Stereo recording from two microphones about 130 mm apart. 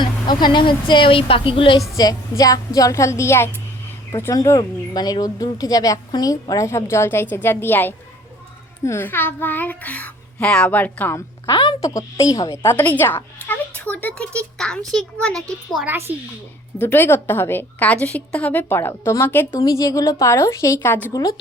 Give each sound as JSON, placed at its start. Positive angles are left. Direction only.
{"t": 0.0, "sound": "a woman's voice", "side_deg": 35}
{"t": 2.0, "sound": "a woman's voice", "side_deg": 30}
{"t": 11.4, "sound": "a woman's voice", "side_deg": 25}
{"t": 12.7, "sound": "a woman's voice", "side_deg": 15}
{"t": 15.8, "sound": "a woman's voice", "side_deg": -15}
{"t": 16.8, "sound": "a woman's voice", "side_deg": 15}
{"t": 19.5, "sound": "a woman's voice", "side_deg": 25}
{"t": 21.1, "sound": "a woman's voice", "side_deg": 30}